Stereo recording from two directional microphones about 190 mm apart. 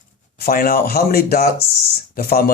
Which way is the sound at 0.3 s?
50° left (ahead or behind).